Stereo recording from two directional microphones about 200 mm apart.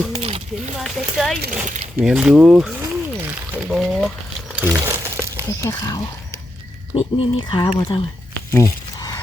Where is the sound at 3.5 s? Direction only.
Centre (ahead or behind).